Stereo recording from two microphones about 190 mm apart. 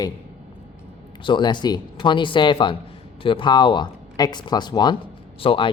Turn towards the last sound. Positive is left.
turn(degrees=25)  # may be behind; listen again after turning